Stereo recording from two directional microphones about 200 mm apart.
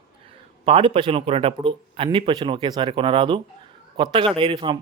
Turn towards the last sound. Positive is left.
turn(degrees=-25)  # may be behind; listen again after turning